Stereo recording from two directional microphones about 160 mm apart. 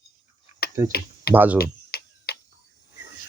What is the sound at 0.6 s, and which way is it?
Typing, 70° left (ahead or behind).